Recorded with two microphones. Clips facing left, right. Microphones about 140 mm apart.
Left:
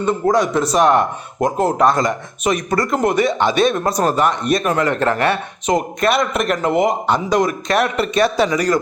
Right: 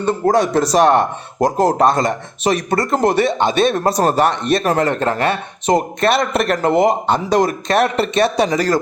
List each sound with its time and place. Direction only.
0.0 s speech: 35° right (ahead or behind)